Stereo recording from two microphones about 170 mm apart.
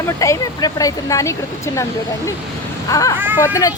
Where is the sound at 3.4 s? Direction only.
20° left (ahead or behind).